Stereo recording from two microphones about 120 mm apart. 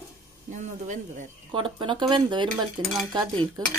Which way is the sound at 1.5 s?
45° right (ahead or behind).